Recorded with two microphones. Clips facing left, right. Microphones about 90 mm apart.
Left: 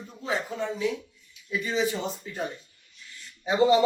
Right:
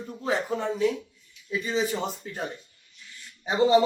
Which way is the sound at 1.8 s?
45° right (ahead or behind).